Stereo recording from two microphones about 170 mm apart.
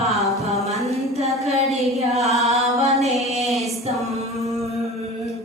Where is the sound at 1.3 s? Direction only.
Centre (ahead or behind).